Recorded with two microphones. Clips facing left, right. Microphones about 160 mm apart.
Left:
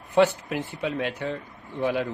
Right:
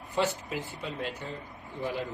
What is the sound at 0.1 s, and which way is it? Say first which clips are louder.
A man's voice: left 9 dB; 65° left (ahead or behind).